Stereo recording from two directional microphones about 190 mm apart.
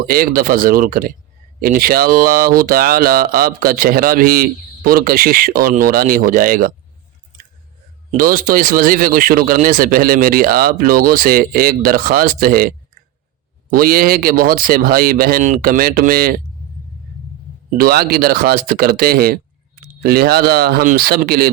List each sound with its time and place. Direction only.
0.0 s speech: 50° right (ahead or behind)
8.1 s speech: 45° right (ahead or behind)
17.7 s speech: 50° right (ahead or behind)